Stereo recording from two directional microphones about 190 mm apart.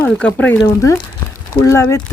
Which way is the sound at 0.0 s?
5° left (ahead or behind).